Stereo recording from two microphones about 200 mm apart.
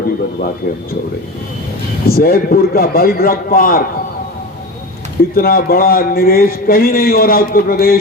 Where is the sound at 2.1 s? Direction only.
50° left (ahead or behind).